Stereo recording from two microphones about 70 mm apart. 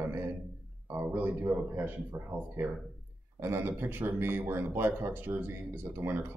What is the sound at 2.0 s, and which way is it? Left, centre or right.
A man's voice, right.